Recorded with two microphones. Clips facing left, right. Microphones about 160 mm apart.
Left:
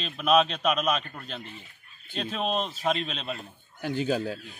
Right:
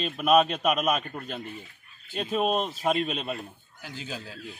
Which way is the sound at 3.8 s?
55° left (ahead or behind).